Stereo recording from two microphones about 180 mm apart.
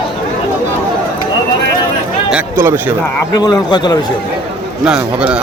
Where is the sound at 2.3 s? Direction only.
10° right (ahead or behind).